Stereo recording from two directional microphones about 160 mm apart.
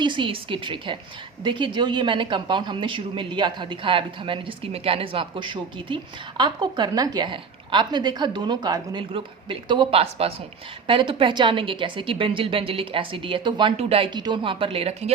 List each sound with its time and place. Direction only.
0.0 s speech: 30° right (ahead or behind)